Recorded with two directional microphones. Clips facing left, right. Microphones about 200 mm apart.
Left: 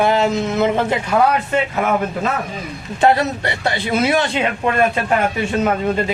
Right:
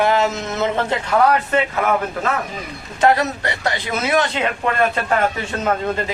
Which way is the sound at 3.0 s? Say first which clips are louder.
Left 1 dB; 30° left (ahead or behind).